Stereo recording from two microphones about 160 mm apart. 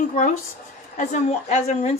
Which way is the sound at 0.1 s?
50° left (ahead or behind).